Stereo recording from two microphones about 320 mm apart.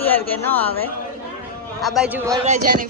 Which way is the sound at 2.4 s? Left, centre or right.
Right.